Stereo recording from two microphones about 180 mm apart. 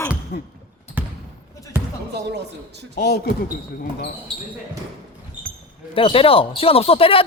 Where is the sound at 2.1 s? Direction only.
70° right (ahead or behind).